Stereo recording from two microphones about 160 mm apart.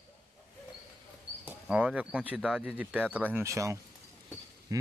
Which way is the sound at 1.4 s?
5° right (ahead or behind).